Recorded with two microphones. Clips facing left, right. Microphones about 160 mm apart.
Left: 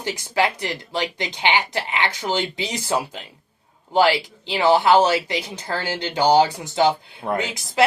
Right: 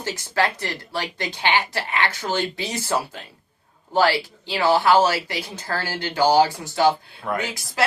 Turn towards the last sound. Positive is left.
turn(degrees=20)  # may be behind; listen again after turning